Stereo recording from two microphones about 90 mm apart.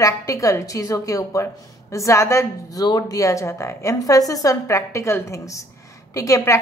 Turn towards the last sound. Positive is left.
turn(degrees=35)  # may be behind; listen again after turning